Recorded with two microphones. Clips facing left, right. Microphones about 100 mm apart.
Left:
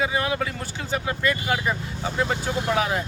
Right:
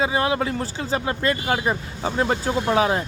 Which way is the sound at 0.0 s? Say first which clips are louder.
Right 3 dB; 30° right (ahead or behind).